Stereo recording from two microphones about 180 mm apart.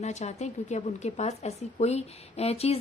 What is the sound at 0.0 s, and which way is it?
A woman's voice, 40° left (ahead or behind).